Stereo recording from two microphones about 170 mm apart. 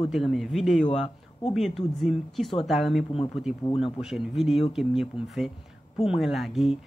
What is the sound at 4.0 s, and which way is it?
A woman's voice, centre (ahead or behind).